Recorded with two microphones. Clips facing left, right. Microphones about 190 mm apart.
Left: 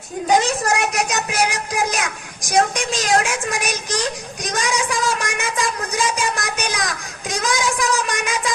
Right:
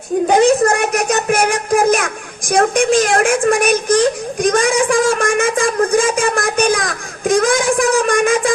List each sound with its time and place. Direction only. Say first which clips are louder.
0.3 s speech: right 6 dB; 55° right (ahead or behind)